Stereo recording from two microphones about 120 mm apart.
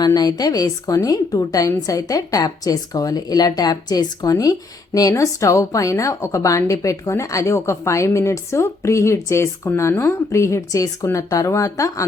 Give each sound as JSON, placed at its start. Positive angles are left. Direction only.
{"t": 0.0, "sound": "a woman's voice", "side_deg": 35}